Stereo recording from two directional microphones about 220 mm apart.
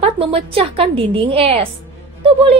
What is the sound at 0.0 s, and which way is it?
A woman's voice, 25° right (ahead or behind).